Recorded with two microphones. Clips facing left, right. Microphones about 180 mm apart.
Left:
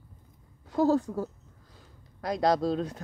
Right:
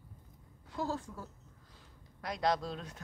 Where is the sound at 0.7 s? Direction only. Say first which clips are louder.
Left 13 dB; 40° left (ahead or behind).